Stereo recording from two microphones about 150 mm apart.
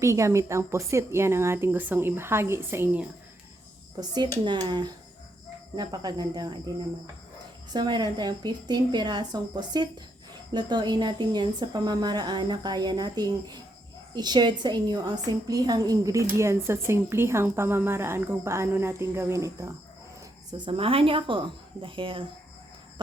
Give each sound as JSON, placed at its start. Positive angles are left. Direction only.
{"t": 0.0, "sound": "a woman's voice", "side_deg": -20}
{"t": 4.1, "sound": "speech", "side_deg": -30}
{"t": 7.7, "sound": "a woman's voice", "side_deg": -30}
{"t": 20.5, "sound": "a woman's voice", "side_deg": -35}